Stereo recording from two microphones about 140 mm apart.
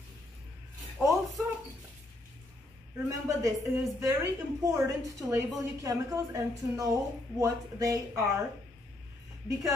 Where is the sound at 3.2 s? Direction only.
25° right (ahead or behind).